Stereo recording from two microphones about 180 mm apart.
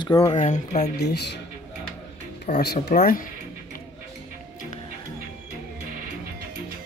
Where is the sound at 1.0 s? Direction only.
65° left (ahead or behind).